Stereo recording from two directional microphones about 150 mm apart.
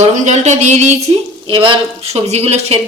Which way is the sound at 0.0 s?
50° right (ahead or behind).